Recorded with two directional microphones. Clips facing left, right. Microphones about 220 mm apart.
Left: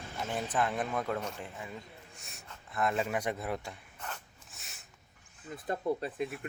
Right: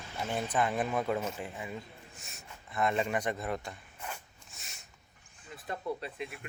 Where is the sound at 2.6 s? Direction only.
Centre (ahead or behind).